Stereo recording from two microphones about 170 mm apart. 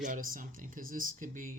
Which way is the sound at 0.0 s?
50° right (ahead or behind).